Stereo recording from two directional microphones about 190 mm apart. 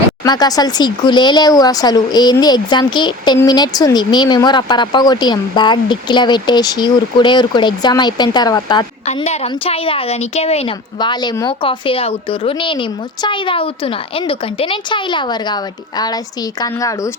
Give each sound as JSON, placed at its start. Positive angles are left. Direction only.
{"t": 0.3, "sound": "speech", "side_deg": 20}
{"t": 9.0, "sound": "speech", "side_deg": 35}